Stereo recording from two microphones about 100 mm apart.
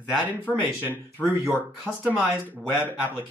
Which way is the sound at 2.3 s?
15° right (ahead or behind).